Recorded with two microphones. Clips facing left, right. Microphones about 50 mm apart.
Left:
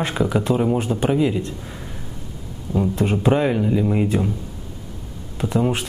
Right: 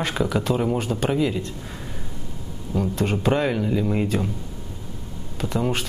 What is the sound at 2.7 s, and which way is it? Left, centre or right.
Speech, centre.